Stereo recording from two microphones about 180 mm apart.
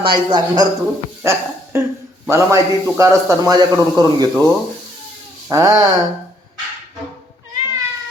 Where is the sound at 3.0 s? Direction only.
20° right (ahead or behind).